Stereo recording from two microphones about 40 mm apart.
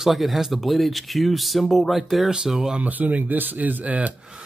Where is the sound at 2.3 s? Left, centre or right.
Centre.